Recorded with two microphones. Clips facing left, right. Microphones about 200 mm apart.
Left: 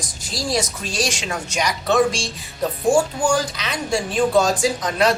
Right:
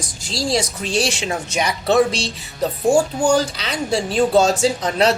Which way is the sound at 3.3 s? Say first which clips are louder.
Right 3 dB; 30° right (ahead or behind).